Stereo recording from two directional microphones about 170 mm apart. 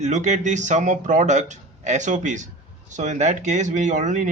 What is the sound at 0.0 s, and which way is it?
Speech, 45° right (ahead or behind).